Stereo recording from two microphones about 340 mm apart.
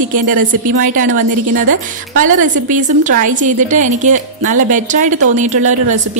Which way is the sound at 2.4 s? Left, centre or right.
Right.